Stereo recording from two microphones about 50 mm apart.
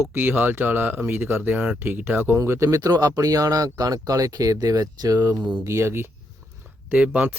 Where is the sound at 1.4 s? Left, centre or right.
Right.